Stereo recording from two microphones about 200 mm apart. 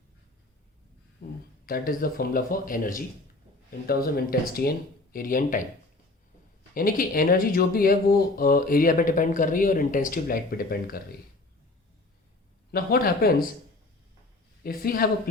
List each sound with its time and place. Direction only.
1.2 s speech: 55° left (ahead or behind)
6.7 s speech: 45° left (ahead or behind)
12.7 s speech: 50° left (ahead or behind)
14.6 s speech: 45° left (ahead or behind)